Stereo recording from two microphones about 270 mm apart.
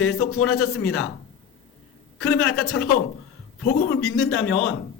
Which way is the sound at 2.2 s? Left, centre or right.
Left.